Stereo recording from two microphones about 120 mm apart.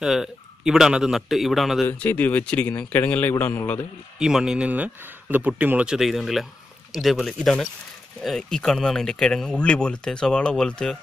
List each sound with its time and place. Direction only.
0.0 s speech: 5° right (ahead or behind)
1.9 s a man's voice: 15° left (ahead or behind)
4.2 s speech: 5° right (ahead or behind)